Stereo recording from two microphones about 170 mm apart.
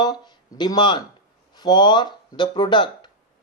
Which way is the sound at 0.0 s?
25° left (ahead or behind).